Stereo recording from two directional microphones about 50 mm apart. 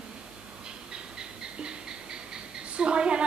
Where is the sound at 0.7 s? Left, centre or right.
Centre.